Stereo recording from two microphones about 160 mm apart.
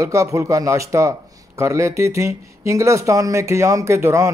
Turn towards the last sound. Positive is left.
turn(degrees=-15)  # may be behind; listen again after turning